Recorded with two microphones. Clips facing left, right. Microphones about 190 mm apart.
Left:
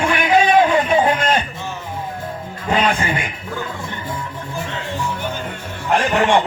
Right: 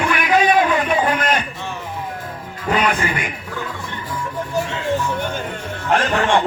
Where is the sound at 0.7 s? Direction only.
25° left (ahead or behind).